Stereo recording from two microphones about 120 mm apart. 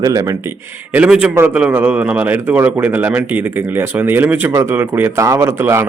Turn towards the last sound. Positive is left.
turn(degrees=-20)  # may be behind; listen again after turning